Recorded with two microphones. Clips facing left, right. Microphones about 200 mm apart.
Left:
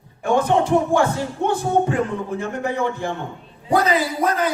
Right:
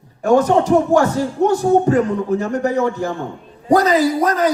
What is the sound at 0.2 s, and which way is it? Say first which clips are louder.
Music: right 5 dB; 40° right (ahead or behind).